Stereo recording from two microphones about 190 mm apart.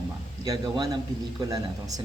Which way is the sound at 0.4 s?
20° right (ahead or behind).